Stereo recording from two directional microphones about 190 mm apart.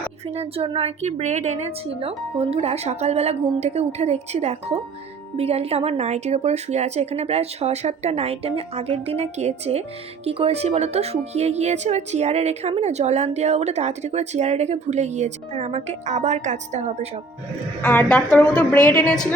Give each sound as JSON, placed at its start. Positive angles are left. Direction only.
{"t": 0.3, "sound": "speech", "side_deg": -30}
{"t": 17.8, "sound": "a woman's voice", "side_deg": 5}